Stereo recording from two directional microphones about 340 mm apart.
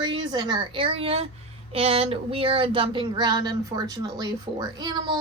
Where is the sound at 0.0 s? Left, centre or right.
Centre.